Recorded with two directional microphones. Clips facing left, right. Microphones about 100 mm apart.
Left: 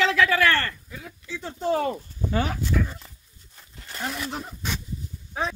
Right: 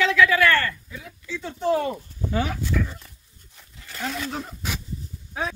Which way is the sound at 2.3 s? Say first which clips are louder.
Even; 35° left (ahead or behind).